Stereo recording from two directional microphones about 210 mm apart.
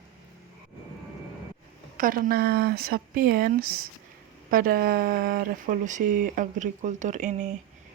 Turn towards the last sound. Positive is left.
turn(degrees=-35)  # may be behind; listen again after turning